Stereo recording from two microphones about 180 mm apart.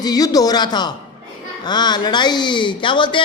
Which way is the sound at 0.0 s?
20° left (ahead or behind).